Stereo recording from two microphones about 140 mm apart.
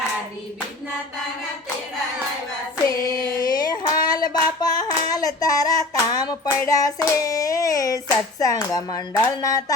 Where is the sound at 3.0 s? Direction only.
30° left (ahead or behind).